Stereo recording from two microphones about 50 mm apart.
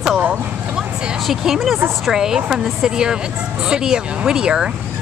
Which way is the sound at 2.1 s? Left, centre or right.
Centre.